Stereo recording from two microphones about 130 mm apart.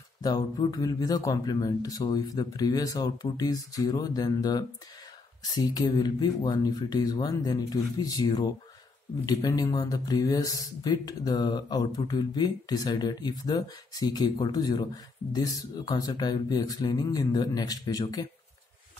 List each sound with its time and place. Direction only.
0.2 s speech: 30° left (ahead or behind)